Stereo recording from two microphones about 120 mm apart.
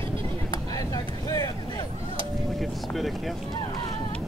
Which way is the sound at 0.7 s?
30° left (ahead or behind).